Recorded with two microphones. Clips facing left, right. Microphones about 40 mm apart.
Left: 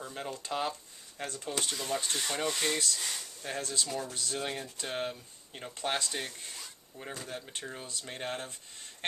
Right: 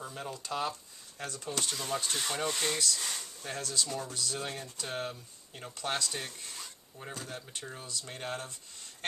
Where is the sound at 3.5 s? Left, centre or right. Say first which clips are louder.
Even; left.